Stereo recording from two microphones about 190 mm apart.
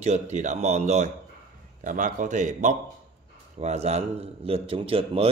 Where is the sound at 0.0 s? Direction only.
40° right (ahead or behind).